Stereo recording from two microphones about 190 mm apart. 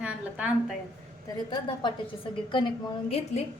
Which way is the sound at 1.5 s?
25° left (ahead or behind).